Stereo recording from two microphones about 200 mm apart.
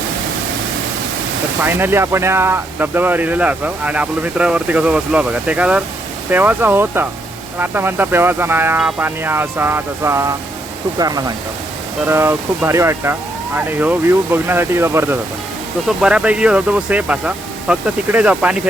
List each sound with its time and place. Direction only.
1.6 s speech: 10° right (ahead or behind)